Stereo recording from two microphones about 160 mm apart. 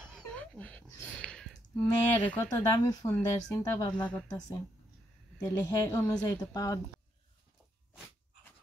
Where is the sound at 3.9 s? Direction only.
5° left (ahead or behind).